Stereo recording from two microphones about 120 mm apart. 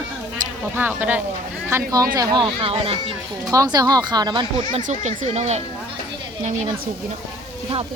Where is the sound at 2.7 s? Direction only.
55° right (ahead or behind).